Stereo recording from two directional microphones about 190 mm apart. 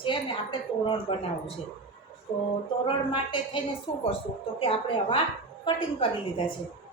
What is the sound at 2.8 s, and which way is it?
A woman's voice, 25° left (ahead or behind).